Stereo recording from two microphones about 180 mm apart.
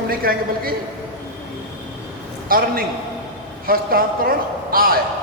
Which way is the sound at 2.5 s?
55° right (ahead or behind).